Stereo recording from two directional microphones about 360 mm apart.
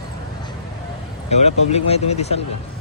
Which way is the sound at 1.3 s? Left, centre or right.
Centre.